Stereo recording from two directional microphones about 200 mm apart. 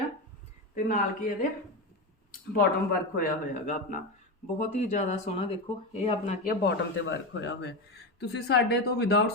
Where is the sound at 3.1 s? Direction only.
40° left (ahead or behind).